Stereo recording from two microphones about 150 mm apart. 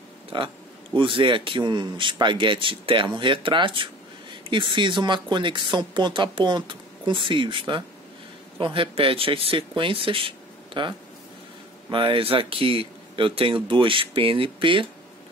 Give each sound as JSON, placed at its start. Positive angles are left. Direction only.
{"t": 0.3, "sound": "a man's voice", "side_deg": -35}